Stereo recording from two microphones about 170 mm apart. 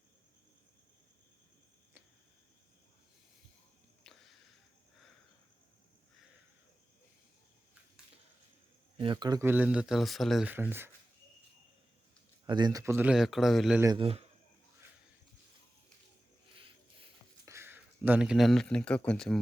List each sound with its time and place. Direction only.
4.0 s a sound: centre (ahead or behind)
9.0 s speech: 25° right (ahead or behind)
9.4 s speech: 10° right (ahead or behind)
10.5 s speech: 10° right (ahead or behind)
12.5 s speech: 25° right (ahead or behind); by 13.8 s centre (ahead or behind)
13.8 s speech: 30° right (ahead or behind)
17.4 s speech: 15° right (ahead or behind); by 19.4 s 5° left (ahead or behind)